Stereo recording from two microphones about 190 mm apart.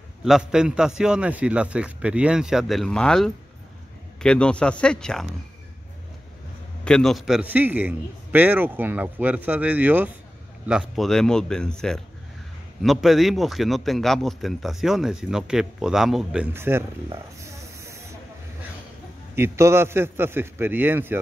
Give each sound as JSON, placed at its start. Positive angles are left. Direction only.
{"t": 0.2, "sound": "a man's voice", "side_deg": -5}
{"t": 6.8, "sound": "a man's voice", "side_deg": 5}
{"t": 17.1, "sound": "snake", "side_deg": -15}
{"t": 19.3, "sound": "a man's voice", "side_deg": -15}